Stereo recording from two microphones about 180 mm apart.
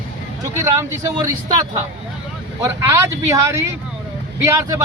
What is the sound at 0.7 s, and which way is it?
Speech, 15° right (ahead or behind).